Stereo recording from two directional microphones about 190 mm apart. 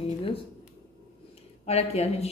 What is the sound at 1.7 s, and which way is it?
Speech, 35° left (ahead or behind).